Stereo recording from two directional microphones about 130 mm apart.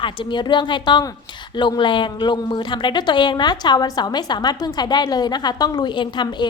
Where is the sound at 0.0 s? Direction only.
40° left (ahead or behind).